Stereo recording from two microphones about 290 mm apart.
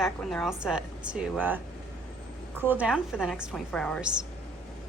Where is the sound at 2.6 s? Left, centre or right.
Centre.